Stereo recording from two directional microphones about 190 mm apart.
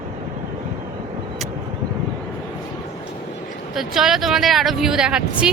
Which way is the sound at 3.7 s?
Centre (ahead or behind).